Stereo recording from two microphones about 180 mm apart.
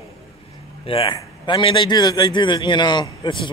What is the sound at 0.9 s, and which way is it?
A man's voice, 30° left (ahead or behind).